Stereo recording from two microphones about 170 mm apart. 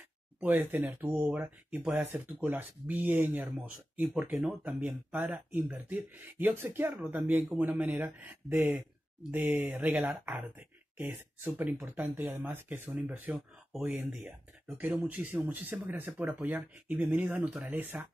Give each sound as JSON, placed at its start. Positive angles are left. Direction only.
{"t": 0.4, "sound": "speech", "side_deg": -10}